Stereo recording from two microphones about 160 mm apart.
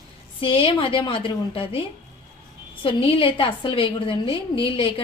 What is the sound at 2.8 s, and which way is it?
A woman's voice, 35° left (ahead or behind).